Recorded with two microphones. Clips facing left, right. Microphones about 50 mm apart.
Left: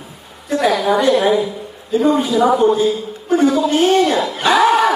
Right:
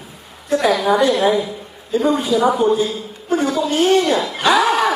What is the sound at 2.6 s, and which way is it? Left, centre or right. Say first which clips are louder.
Speech: left 2 dB; left.